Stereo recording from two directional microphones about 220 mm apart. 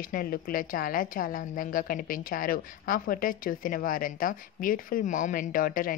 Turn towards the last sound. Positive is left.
turn(degrees=40)  # may be behind; listen again after turning